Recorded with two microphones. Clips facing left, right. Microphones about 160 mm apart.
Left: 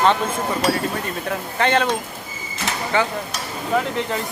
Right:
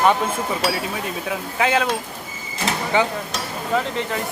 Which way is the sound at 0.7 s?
5° right (ahead or behind).